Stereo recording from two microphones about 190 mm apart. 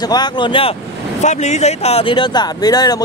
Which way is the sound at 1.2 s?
35° left (ahead or behind).